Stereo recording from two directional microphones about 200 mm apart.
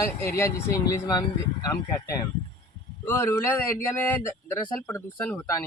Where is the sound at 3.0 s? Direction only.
15° left (ahead or behind).